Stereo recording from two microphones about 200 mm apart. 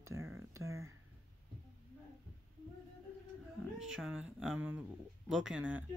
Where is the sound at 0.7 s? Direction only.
90° right.